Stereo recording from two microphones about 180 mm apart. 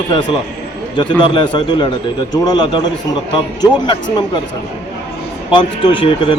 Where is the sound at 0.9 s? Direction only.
25° left (ahead or behind).